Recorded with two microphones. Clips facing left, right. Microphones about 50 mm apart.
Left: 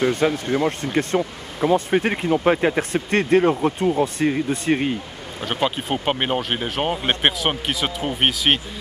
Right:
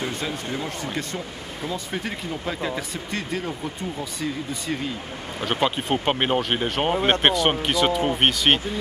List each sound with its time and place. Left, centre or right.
0.0 s speech: left
5.4 s speech: centre